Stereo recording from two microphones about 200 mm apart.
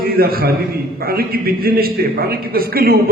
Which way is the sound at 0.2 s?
50° right (ahead or behind).